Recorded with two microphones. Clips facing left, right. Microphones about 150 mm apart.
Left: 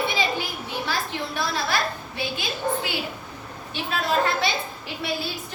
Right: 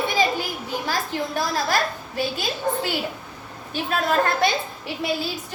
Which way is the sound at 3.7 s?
50° right (ahead or behind).